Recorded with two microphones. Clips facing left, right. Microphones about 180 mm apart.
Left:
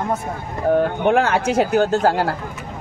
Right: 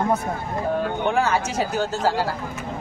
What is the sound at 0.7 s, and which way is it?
Speech, 60° left (ahead or behind).